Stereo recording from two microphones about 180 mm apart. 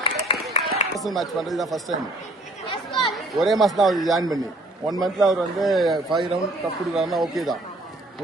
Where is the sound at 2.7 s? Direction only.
25° left (ahead or behind).